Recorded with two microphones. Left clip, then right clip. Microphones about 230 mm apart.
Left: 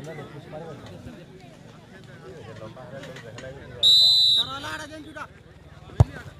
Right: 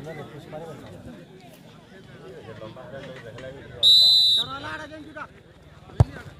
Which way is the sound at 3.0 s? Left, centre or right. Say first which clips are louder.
Right 1 dB; left.